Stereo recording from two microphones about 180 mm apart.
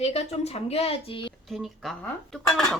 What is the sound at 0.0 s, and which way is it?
A woman's voice, 35° left (ahead or behind).